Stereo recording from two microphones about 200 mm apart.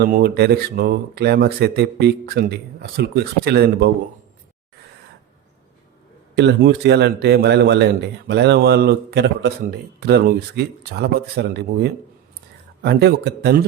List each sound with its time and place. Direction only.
0.0 s speech: 50° right (ahead or behind)
6.3 s speech: 60° right (ahead or behind)